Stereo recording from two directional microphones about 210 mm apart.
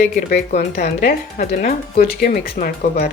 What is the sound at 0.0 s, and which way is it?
Speech, 40° left (ahead or behind).